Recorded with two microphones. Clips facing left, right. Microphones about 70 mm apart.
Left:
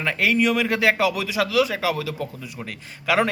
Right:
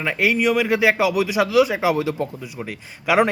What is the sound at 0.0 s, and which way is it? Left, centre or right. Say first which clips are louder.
Speech: right 1 dB; centre.